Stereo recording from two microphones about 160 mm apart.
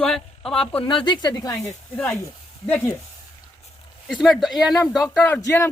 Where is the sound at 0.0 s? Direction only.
5° left (ahead or behind).